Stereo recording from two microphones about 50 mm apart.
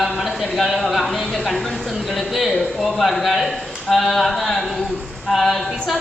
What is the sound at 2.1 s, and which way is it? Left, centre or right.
Speech, centre.